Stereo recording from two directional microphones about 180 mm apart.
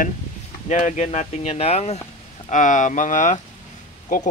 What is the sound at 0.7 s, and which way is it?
Speech, 40° left (ahead or behind).